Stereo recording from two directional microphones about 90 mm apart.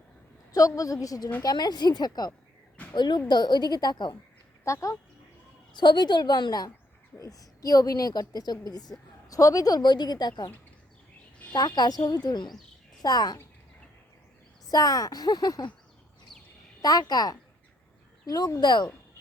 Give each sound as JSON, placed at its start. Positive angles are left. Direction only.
{"t": 0.5, "sound": "a woman's voice", "side_deg": 40}
{"t": 4.6, "sound": "a woman's voice", "side_deg": 35}
{"t": 5.7, "sound": "a woman's voice", "side_deg": 55}
{"t": 11.5, "sound": "a woman's voice", "side_deg": 50}
{"t": 14.7, "sound": "a woman's voice", "side_deg": 45}
{"t": 16.8, "sound": "a woman's voice", "side_deg": 45}